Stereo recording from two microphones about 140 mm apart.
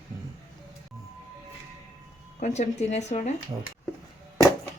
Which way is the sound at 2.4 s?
55° left (ahead or behind).